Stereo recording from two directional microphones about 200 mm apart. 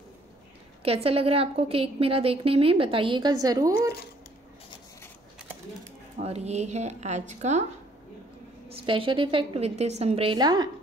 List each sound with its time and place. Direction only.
0.8 s a woman's voice: 30° right (ahead or behind)
6.1 s speech: 30° right (ahead or behind)
8.6 s a woman's voice: 25° right (ahead or behind)